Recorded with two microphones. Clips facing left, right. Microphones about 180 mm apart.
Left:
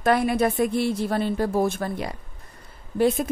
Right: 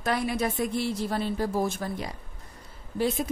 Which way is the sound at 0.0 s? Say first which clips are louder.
Left 7 dB; 55° left (ahead or behind).